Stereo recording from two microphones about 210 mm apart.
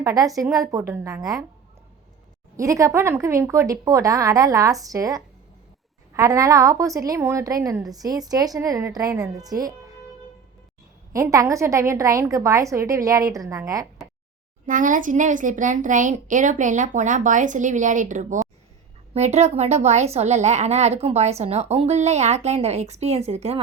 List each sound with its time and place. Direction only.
0.0 s a woman's voice: 15° right (ahead or behind)
2.6 s a woman's voice: 15° right (ahead or behind)
11.1 s a woman's voice: 15° right (ahead or behind)
14.7 s a woman's voice: 40° right (ahead or behind)